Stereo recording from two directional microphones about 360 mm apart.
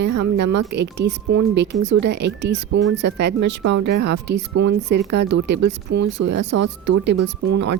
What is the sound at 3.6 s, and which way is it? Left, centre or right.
Speech, right.